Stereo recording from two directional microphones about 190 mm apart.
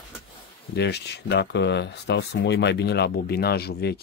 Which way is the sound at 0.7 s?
60° left (ahead or behind).